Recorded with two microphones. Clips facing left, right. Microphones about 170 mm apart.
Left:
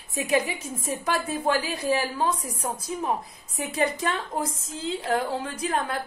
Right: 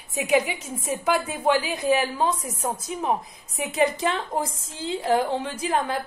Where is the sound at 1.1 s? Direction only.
20° right (ahead or behind).